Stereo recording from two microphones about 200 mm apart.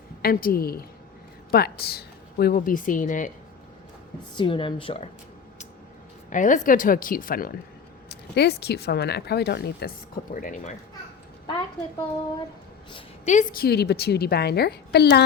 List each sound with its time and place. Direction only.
0.2 s a woman's voice: 45° left (ahead or behind)
4.4 s a woman's voice: 25° left (ahead or behind)
6.3 s speech: 40° left (ahead or behind)
11.4 s a sound: 25° left (ahead or behind)
12.9 s speech: 35° left (ahead or behind); by 15.2 s 55° left (ahead or behind)